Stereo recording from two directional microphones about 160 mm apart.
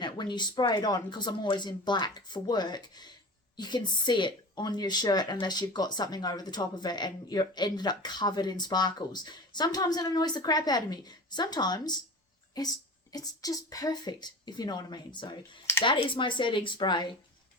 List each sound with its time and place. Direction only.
0.0 s speech: 30° left (ahead or behind)